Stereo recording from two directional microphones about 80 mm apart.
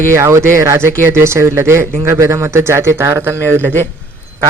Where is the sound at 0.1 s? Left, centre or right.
Right.